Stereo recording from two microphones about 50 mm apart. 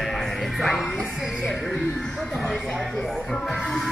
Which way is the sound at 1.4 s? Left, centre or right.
Centre.